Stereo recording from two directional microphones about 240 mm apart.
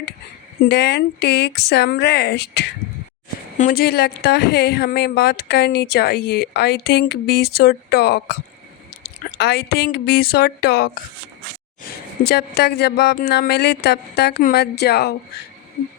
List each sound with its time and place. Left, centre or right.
0.7 s speech: left
9.4 s speech: left
12.3 s speech: left